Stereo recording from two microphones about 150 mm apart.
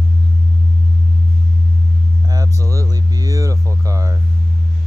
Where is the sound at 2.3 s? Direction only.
25° right (ahead or behind).